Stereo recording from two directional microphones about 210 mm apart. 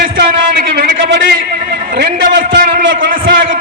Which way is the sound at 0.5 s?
50° right (ahead or behind).